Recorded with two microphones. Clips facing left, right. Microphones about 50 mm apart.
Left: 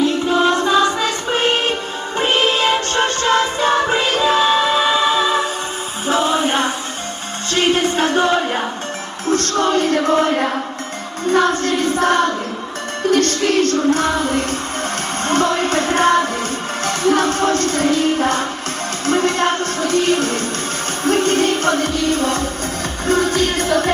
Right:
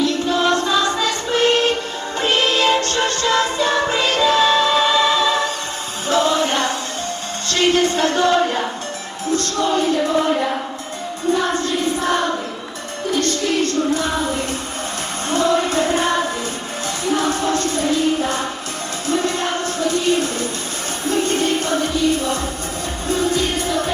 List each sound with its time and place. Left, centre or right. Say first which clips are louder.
0.0 s music: left 2 dB; left
9.3 s music: left 3 dB; left
11.3 s a sound: left 3 dB; left
13.1 s music: left 4 dB; left